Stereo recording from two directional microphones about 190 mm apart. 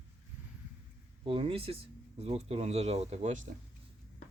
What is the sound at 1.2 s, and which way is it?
Speech, 30° right (ahead or behind).